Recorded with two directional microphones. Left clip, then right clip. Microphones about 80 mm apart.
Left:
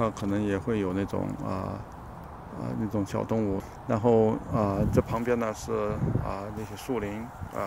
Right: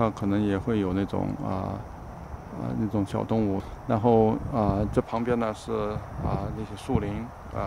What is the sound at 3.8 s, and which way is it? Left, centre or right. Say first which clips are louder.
Speech: right 1 dB; centre.